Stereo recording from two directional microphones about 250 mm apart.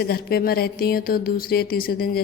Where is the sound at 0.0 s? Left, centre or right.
Left.